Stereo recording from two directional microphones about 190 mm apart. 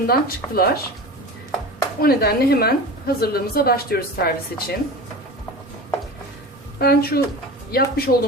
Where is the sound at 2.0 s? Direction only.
55° left (ahead or behind).